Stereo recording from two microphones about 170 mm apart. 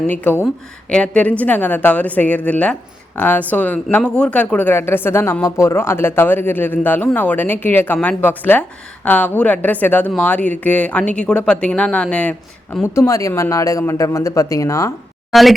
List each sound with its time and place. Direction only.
0.1 s speech: 10° left (ahead or behind)
15.3 s speech: centre (ahead or behind)